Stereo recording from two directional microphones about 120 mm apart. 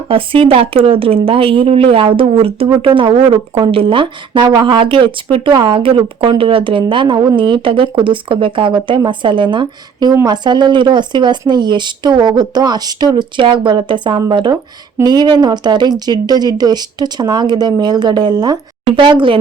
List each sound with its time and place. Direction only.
0.1 s speech: 50° right (ahead or behind)